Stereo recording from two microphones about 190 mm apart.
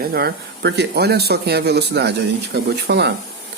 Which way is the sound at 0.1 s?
55° right (ahead or behind).